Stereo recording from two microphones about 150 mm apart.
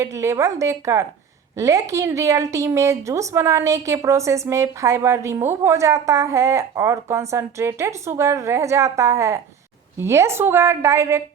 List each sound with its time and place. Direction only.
0.0 s a woman's voice: 20° right (ahead or behind)